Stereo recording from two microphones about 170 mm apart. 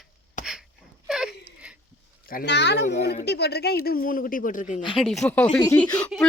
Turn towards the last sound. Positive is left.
turn(degrees=10)  # may be behind; listen again after turning